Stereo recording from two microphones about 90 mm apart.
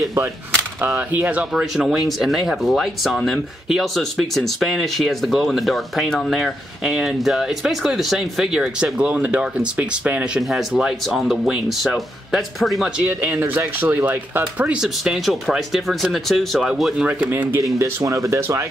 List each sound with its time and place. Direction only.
0.7 s speech: 20° right (ahead or behind); by 12.9 s centre (ahead or behind)
12.9 s speech: 15° right (ahead or behind)
14.7 s speech: 5° right (ahead or behind)
17.0 s speech: 15° right (ahead or behind)
17.6 s speech: 35° right (ahead or behind)